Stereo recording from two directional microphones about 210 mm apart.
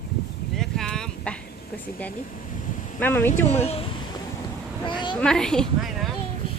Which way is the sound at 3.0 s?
10° left (ahead or behind).